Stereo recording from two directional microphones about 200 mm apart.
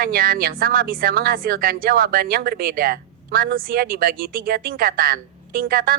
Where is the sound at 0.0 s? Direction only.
45° right (ahead or behind).